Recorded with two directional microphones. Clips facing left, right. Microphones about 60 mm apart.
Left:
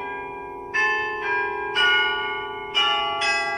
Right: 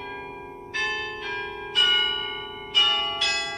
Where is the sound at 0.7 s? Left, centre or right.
Left.